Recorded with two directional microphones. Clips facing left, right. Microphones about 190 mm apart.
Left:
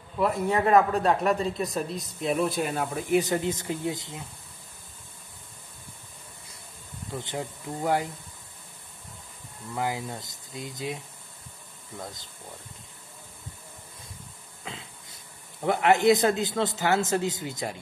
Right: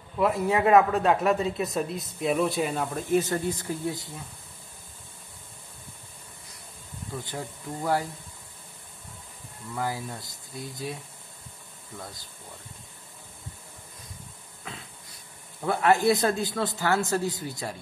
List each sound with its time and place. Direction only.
0.2 s speech: centre (ahead or behind)
3.2 s speech: 20° left (ahead or behind)
7.2 s speech: 20° left (ahead or behind)
9.8 s speech: 20° left (ahead or behind)
12.0 s speech: 20° left (ahead or behind)
14.6 s throat clearing: 25° left (ahead or behind)
15.6 s speech: 20° left (ahead or behind)